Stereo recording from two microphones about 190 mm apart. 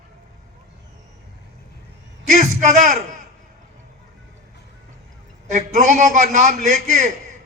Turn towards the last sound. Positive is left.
turn(degrees=-40)  # may be behind; listen again after turning